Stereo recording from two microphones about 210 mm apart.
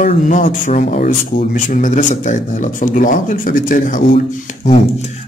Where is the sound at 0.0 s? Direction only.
40° left (ahead or behind).